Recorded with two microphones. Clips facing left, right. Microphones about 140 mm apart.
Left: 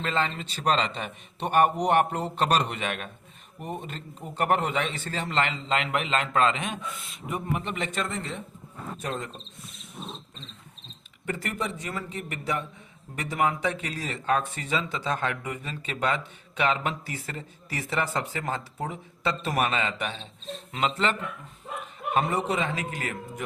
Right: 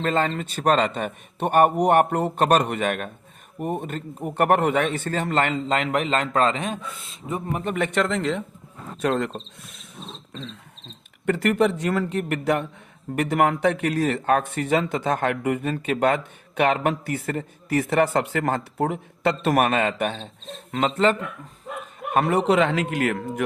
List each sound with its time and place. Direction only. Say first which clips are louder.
0.0 s speech: right 5 dB; 45° right (ahead or behind)
7.6 s speech: right 7 dB; 45° right (ahead or behind)
7.9 s speech: right 9 dB; 75° right (ahead or behind)
9.0 s a man's voice: right 11 dB; 70° right (ahead or behind)
11.3 s speech: right 11 dB; 70° right (ahead or behind); by 21.2 s 45° right (ahead or behind)
22.2 s a man's voice: right 8 dB; 65° right (ahead or behind)